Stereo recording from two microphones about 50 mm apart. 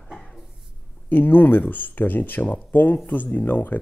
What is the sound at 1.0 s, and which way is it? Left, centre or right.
Speech, left.